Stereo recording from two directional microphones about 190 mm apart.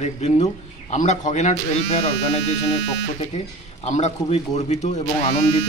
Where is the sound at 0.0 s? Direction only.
35° left (ahead or behind).